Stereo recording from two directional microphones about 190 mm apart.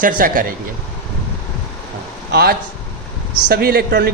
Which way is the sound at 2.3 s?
55° right (ahead or behind).